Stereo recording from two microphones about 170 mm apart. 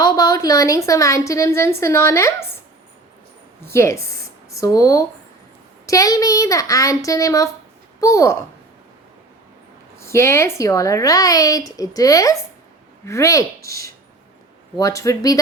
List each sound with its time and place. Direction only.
0.0 s a woman's voice: 20° left (ahead or behind)
3.6 s a woman's voice: 15° left (ahead or behind)
10.0 s speech: 15° left (ahead or behind)